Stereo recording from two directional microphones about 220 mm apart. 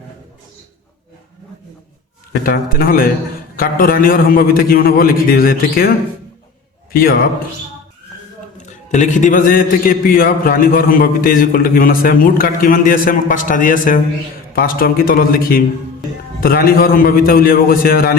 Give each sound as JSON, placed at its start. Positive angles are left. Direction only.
{"t": 2.4, "sound": "a man's voice", "side_deg": 40}
{"t": 8.6, "sound": "a man's voice", "side_deg": 35}